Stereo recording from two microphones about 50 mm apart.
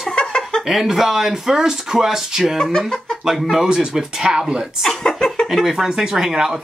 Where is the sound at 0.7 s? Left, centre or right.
Centre.